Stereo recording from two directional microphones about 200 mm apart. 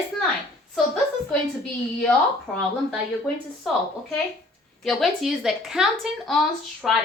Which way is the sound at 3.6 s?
Centre (ahead or behind).